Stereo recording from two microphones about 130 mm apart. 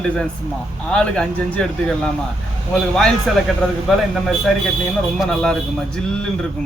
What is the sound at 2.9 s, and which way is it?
Speech, 5° left (ahead or behind).